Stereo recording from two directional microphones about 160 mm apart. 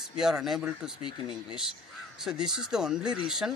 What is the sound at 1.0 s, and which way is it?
Speech, 30° left (ahead or behind).